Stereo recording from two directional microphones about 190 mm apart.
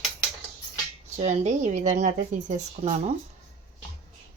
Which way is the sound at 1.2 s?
35° right (ahead or behind).